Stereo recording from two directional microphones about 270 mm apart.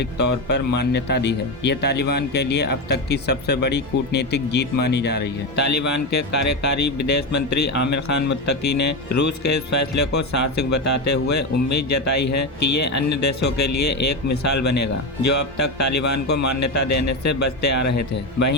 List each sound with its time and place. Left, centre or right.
0.8 s speech: left
5.5 s speech: left